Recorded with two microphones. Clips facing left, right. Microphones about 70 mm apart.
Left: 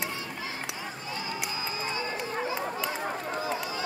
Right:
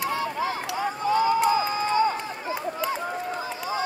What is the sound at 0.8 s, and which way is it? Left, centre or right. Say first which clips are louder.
Run: right 14 dB; right.